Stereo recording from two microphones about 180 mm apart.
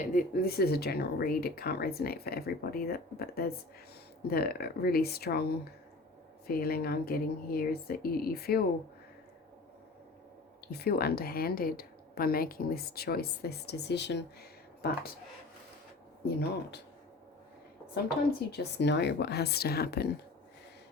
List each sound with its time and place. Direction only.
0.1 s a woman's voice: 55° left (ahead or behind)
6.5 s a woman's voice: 55° left (ahead or behind)
10.7 s a woman's voice: 60° left (ahead or behind)
16.2 s a woman's voice: 65° left (ahead or behind)
18.5 s a woman's voice: 70° left (ahead or behind)